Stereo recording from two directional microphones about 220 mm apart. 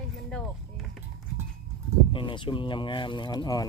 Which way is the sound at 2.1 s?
20° left (ahead or behind).